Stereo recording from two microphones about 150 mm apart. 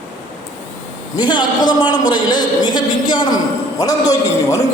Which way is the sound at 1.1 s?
30° left (ahead or behind).